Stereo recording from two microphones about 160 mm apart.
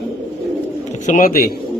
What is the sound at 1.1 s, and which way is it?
Speech, 60° left (ahead or behind).